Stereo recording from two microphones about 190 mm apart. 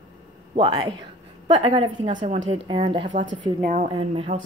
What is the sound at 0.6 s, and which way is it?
A woman's voice, 20° right (ahead or behind).